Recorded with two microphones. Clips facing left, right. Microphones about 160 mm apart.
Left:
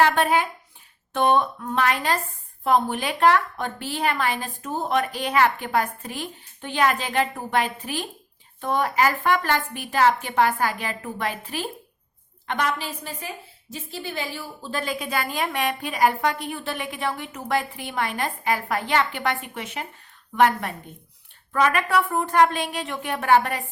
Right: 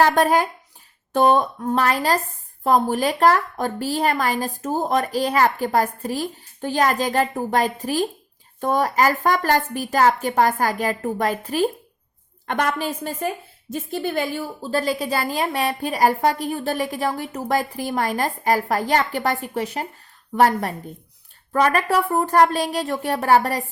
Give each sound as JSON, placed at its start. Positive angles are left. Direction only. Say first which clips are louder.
{"t": 0.0, "sound": "a woman's voice", "louder": "right 3 dB", "side_deg": -40}